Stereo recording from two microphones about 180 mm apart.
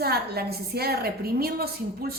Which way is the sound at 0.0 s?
60° right (ahead or behind).